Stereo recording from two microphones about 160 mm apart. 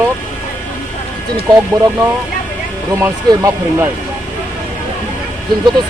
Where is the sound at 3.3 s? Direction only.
25° right (ahead or behind).